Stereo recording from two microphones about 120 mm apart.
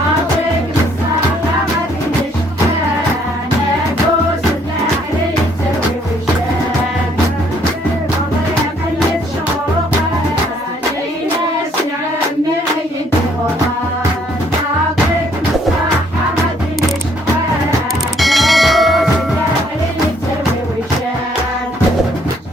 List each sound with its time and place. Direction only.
18.2 s bell: centre (ahead or behind)